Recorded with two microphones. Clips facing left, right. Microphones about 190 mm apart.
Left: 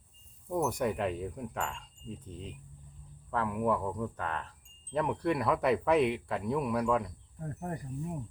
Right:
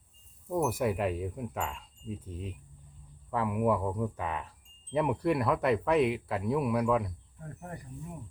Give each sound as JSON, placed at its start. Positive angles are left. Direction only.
{"t": 0.4, "sound": "chime", "side_deg": -5}
{"t": 7.3, "sound": "speech", "side_deg": 40}